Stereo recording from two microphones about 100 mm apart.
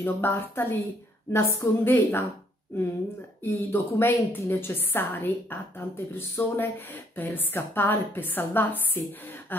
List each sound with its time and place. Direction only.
0.0 s a woman's voice: 20° left (ahead or behind)
3.4 s a woman's voice: 25° left (ahead or behind)